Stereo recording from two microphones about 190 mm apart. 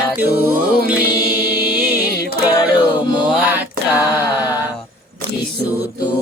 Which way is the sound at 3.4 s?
10° right (ahead or behind).